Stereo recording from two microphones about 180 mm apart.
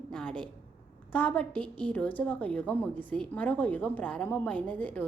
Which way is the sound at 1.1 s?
10° left (ahead or behind).